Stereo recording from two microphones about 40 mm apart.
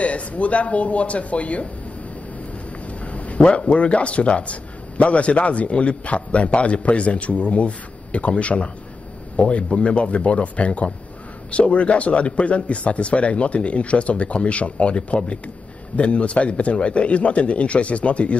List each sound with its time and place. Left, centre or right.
0.0 s a man's voice: left
2.9 s a sound: left
3.4 s a man's voice: left